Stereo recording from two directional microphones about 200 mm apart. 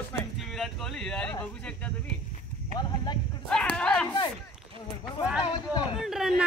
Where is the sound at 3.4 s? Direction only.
5° left (ahead or behind).